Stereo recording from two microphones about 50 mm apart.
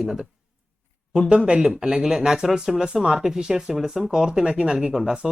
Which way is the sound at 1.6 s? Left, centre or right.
Centre.